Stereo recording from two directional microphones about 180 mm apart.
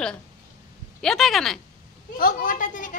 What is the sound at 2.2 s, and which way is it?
Speech, 50° left (ahead or behind).